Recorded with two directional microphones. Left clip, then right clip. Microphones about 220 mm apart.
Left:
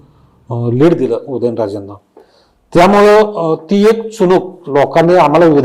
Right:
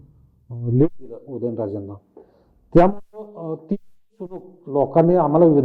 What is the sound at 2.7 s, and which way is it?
Speech, 20° left (ahead or behind).